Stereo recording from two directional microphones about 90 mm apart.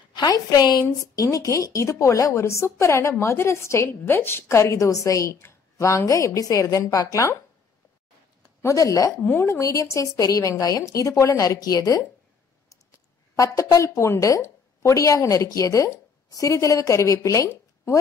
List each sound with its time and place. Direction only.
0.1 s a woman's voice: 50° left (ahead or behind)
8.6 s a woman's voice: 40° left (ahead or behind)
9.2 s speech: 15° left (ahead or behind)
9.5 s a woman's voice: 35° left (ahead or behind)
13.4 s a woman's voice: 35° left (ahead or behind)